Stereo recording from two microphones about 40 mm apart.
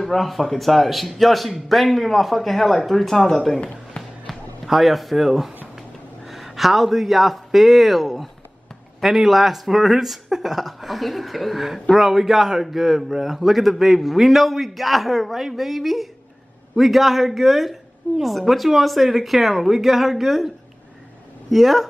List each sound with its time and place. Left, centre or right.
0.0 s a woman's voice: centre
3.9 s music: left
4.6 s a woman's voice: centre
5.8 s a sound: centre
7.5 s a woman's voice: centre